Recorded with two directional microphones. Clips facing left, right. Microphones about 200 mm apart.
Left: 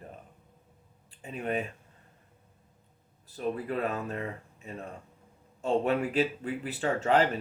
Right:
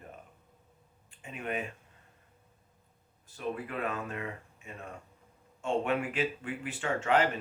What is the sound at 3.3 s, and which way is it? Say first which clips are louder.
Speech: left 4 dB; 35° left (ahead or behind).